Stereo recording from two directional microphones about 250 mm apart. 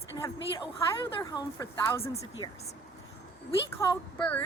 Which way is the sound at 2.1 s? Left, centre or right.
Left.